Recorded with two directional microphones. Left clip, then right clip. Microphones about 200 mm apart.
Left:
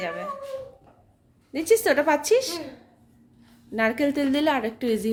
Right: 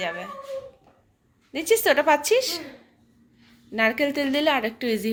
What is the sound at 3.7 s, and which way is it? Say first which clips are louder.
A woman's voice: right 1 dB; 10° left (ahead or behind).